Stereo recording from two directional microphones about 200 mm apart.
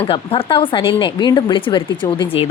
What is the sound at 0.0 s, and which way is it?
Speech, 30° left (ahead or behind).